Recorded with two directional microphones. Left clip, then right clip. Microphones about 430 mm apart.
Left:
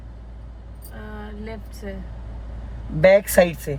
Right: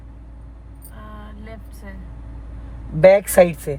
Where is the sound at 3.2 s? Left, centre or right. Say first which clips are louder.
Right 3 dB; right.